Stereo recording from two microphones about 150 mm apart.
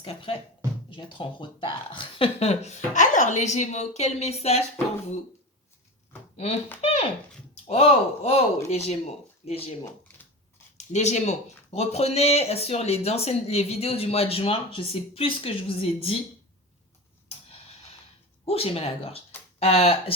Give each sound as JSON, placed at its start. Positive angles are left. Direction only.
{"t": 0.0, "sound": "speech", "side_deg": 35}
{"t": 6.3, "sound": "speech", "side_deg": 45}
{"t": 10.8, "sound": "speech", "side_deg": 50}
{"t": 18.4, "sound": "speech", "side_deg": 40}